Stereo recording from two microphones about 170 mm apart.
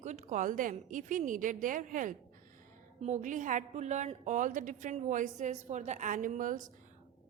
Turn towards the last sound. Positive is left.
turn(degrees=-50)  # may be behind; listen again after turning